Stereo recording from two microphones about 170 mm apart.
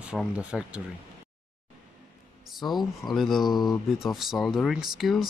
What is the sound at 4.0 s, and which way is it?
Speech, centre (ahead or behind).